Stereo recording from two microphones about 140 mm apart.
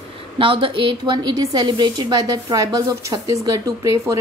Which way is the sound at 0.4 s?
40° right (ahead or behind).